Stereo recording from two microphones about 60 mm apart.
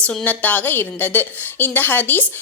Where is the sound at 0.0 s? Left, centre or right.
Centre.